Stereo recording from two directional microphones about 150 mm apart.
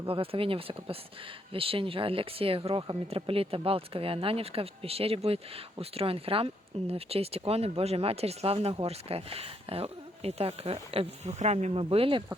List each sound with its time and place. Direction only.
0.1 s speech: 40° right (ahead or behind)